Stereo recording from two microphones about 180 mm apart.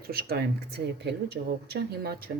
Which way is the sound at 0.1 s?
60° right (ahead or behind).